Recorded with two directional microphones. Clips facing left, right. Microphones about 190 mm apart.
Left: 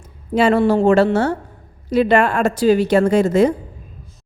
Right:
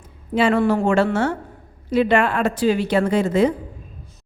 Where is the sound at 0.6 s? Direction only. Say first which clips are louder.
Left 4 dB; 30° left (ahead or behind).